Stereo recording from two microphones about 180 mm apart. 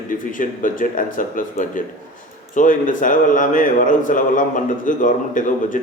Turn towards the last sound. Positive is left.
turn(degrees=45)  # may be behind; listen again after turning